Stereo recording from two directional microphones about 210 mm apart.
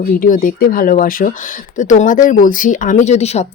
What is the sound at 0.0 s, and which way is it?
Speech, 40° left (ahead or behind).